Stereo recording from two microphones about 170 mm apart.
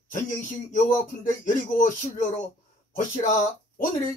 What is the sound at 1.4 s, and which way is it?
Speech, 50° left (ahead or behind).